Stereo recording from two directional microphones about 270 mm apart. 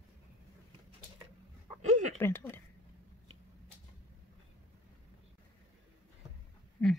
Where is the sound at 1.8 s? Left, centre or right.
Right.